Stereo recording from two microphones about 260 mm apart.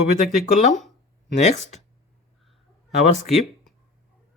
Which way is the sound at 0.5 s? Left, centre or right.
Left.